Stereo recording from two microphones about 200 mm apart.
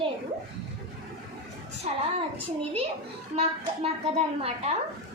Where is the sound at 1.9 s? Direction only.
35° right (ahead or behind).